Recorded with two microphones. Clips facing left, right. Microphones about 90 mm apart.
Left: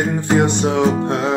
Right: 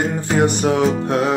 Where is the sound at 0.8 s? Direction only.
20° left (ahead or behind).